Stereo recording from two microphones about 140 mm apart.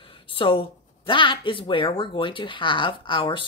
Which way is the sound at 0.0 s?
40° left (ahead or behind).